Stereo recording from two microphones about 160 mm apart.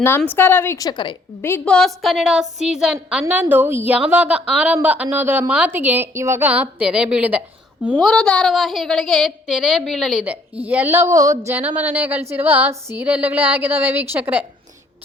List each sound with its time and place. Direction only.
0.2 s a woman's voice: 10° left (ahead or behind)
0.9 s a woman's voice: 30° left (ahead or behind)
1.4 s a woman's voice: 15° left (ahead or behind); by 7.4 s 10° right (ahead or behind)
8.0 s a woman's voice: 5° left (ahead or behind)